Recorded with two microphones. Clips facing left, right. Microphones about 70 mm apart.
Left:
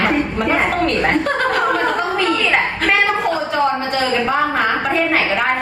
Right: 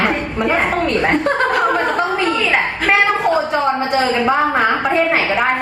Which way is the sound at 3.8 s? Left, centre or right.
Right.